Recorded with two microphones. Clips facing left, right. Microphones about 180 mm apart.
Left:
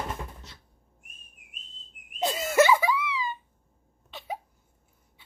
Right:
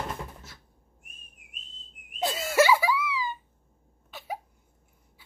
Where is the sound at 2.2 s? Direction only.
20° left (ahead or behind).